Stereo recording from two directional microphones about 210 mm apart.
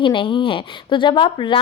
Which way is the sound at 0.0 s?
25° left (ahead or behind).